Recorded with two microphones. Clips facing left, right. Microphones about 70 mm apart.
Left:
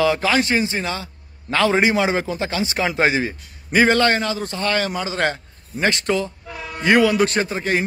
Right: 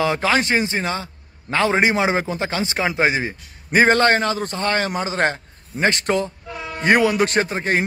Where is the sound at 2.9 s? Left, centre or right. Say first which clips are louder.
Left 2 dB; centre; by 7.8 s right.